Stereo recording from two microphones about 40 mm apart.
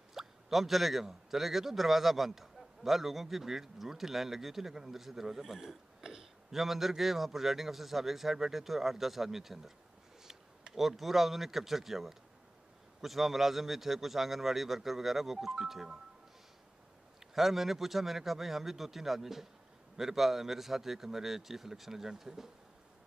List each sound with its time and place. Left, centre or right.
0.1 s a man's voice: centre
17.3 s a man's voice: centre